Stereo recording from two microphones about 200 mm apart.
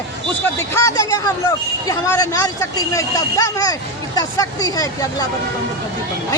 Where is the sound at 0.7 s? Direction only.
15° left (ahead or behind).